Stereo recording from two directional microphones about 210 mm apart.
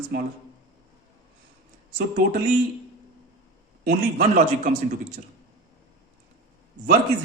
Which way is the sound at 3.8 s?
50° right (ahead or behind).